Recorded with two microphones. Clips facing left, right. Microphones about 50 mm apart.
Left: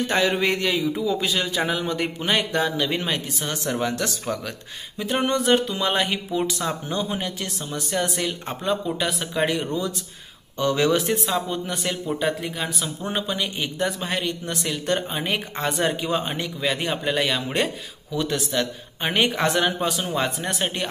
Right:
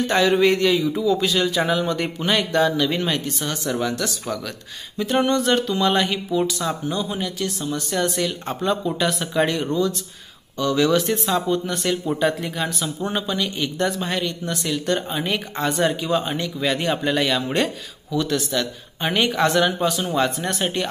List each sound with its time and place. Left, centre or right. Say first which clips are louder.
0.0 s speech: right 4 dB; centre
3.4 s speech: even; left
4.9 s speech: right 3 dB; centre
8.6 s speech: right 3 dB; centre
10.6 s speech: right 2 dB; left
11.1 s speech: right 3 dB; centre
13.1 s speech: left 1 dB; left
14.1 s speech: right 1 dB; left
16.5 s speech: right 3 dB; centre
18.1 s speech: right 2 dB; left